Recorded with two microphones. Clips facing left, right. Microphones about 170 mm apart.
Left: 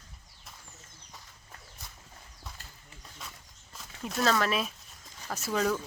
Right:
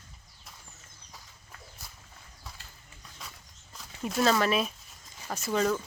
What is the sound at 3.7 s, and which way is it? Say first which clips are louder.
Speech: right 3 dB; centre (ahead or behind).